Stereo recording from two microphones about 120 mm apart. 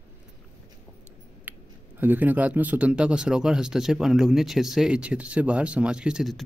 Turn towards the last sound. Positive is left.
turn(degrees=-5)  # may be behind; listen again after turning